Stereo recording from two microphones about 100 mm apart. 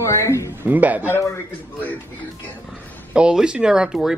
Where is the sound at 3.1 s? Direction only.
10° right (ahead or behind).